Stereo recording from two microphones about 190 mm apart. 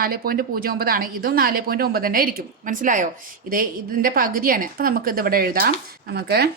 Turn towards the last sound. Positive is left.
turn(degrees=-55)  # may be behind; listen again after turning